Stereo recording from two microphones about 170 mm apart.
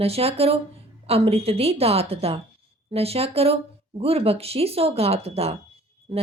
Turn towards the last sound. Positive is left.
turn(degrees=-30)  # may be behind; listen again after turning